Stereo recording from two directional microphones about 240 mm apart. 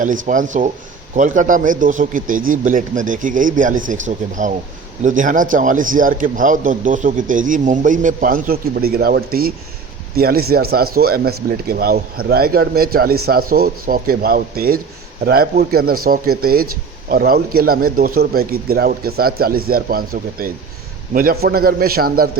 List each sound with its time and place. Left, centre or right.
0.0 s a man's voice: right